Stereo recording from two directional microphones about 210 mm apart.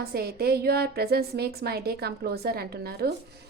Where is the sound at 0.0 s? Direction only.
45° right (ahead or behind).